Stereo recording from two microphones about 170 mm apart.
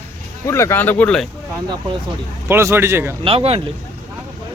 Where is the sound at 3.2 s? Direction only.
30° right (ahead or behind).